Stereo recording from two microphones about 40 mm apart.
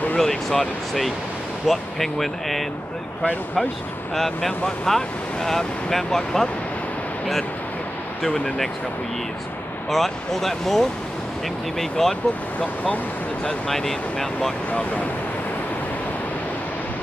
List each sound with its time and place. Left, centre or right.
0.2 s speech: centre
4.1 s speech: centre
9.8 s speech: centre
12.5 s speech: left
13.5 s speech: centre
14.7 s speech: left